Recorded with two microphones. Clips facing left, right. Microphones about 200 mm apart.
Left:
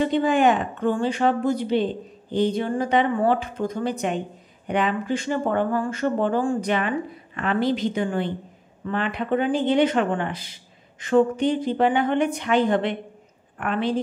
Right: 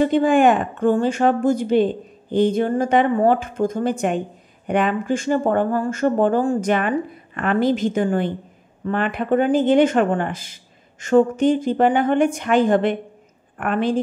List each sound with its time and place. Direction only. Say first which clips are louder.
0.0 s speech: right 4 dB; 50° right (ahead or behind)